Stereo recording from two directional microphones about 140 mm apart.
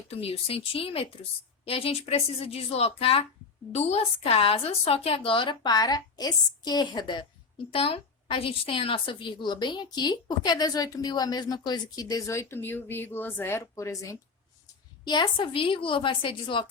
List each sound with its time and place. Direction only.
0.1 s speech: 45° left (ahead or behind)
7.7 s a woman's voice: 40° left (ahead or behind); by 14.2 s 20° left (ahead or behind)
15.0 s speech: 35° left (ahead or behind)